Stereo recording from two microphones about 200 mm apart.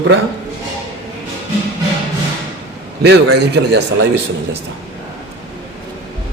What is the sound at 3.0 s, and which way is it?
Speech, 55° right (ahead or behind).